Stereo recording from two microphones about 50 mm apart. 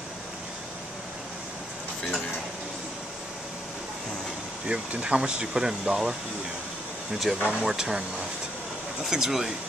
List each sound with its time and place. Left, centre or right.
4.6 s speech: right
7.4 s speech: centre
9.1 s speech: centre